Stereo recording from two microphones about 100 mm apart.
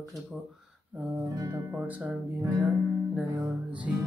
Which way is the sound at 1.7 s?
15° right (ahead or behind).